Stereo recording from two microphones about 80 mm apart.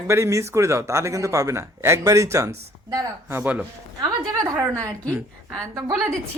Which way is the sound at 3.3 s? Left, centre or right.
Right.